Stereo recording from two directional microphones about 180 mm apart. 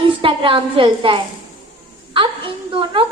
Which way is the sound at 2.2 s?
30° right (ahead or behind).